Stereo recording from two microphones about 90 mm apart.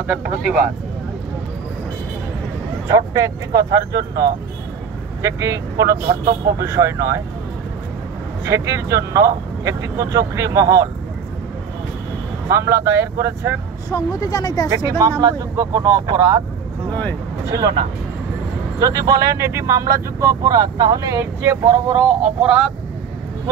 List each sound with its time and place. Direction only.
0.0 s speech: 10° right (ahead or behind)
2.9 s speech: 40° right (ahead or behind)
8.5 s speech: 35° right (ahead or behind)
12.4 s speech: 30° right (ahead or behind)
13.8 s speech: 40° left (ahead or behind)
15.0 s speech: 45° right (ahead or behind)
17.5 s speech: 45° right (ahead or behind)
18.8 s speech: 45° right (ahead or behind)
22.0 s speech: 10° right (ahead or behind)